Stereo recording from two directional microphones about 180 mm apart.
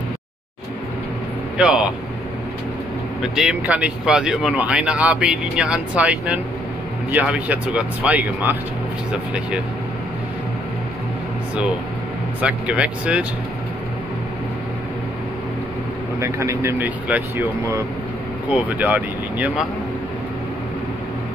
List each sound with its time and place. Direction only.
1.6 s speech: 5° right (ahead or behind)
3.2 s speech: 5° right (ahead or behind)
12.4 s speech: 5° right (ahead or behind)
16.2 s speech: 15° right (ahead or behind)